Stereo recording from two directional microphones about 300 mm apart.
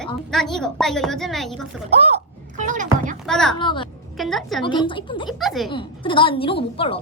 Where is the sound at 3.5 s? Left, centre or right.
Centre.